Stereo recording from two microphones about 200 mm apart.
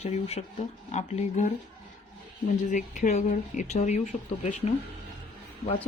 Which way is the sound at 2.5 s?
40° left (ahead or behind).